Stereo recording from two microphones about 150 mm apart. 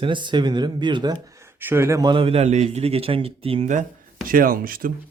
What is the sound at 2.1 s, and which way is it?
A man's voice, 40° right (ahead or behind).